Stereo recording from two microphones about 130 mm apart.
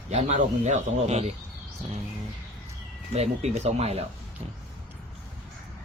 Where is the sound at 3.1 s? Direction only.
55° right (ahead or behind).